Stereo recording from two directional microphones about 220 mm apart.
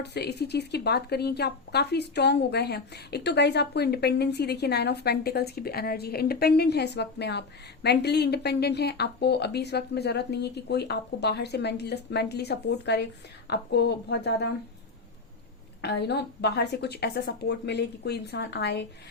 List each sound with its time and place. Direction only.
0.0 s speech: 50° left (ahead or behind)
15.8 s speech: 50° left (ahead or behind)